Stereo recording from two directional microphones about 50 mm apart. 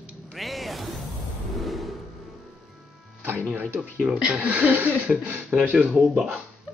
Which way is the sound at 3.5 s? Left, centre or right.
Right.